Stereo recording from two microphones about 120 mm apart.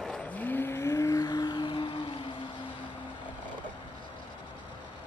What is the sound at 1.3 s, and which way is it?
Music, 40° left (ahead or behind).